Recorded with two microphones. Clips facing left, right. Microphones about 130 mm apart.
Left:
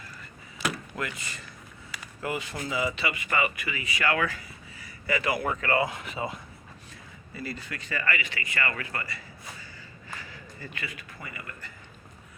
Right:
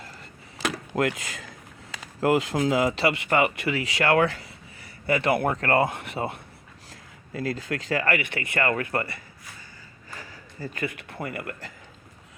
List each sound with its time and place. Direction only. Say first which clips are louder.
0.6 s a sound: right 7 dB; 75° right (ahead or behind)
2.2 s speech: right 11 dB; 90° right
3.3 s speech: right 6 dB; 65° right (ahead or behind)
5.0 s speech: right 5 dB; 60° right (ahead or behind)
6.9 s speech: right 8 dB; 90° right; by 9.2 s 55° right (ahead or behind)
10.2 s a sound: right 4 dB; 45° right (ahead or behind)
10.9 s speech: right 9 dB; 65° right (ahead or behind)